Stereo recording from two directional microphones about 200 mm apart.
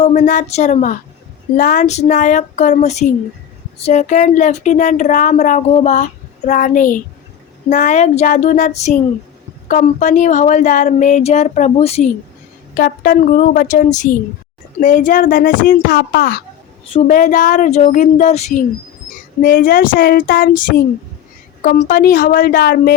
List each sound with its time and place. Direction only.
0.0 s speech: 35° left (ahead or behind)
12.7 s speech: 45° left (ahead or behind)
16.9 s speech: 40° left (ahead or behind)
19.4 s speech: 45° left (ahead or behind)